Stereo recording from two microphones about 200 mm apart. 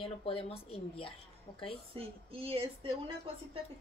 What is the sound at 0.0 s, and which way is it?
Speech, 25° left (ahead or behind).